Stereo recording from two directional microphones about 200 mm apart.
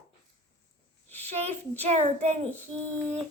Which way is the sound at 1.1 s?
10° left (ahead or behind).